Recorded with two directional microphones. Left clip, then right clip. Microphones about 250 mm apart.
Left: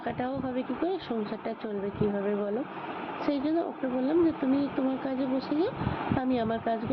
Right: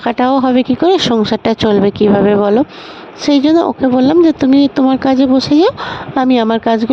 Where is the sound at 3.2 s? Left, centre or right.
Right.